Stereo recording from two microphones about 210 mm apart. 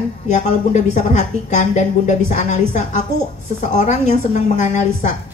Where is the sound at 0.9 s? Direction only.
35° left (ahead or behind).